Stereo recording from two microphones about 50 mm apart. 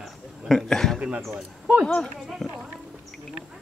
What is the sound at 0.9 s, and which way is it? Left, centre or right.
Speech, centre.